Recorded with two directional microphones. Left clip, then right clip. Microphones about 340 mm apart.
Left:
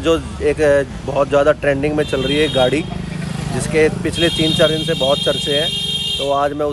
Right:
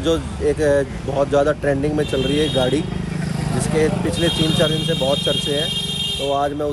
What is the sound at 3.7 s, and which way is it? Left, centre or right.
Speech, centre.